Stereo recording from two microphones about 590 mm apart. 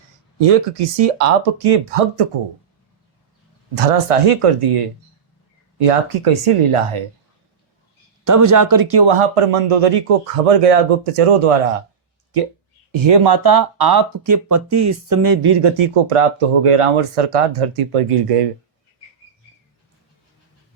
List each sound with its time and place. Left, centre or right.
0.3 s speech: right
3.8 s speech: right
8.2 s speech: right
13.1 s speech: right